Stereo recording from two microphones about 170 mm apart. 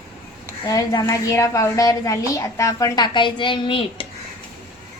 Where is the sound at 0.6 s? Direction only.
20° left (ahead or behind).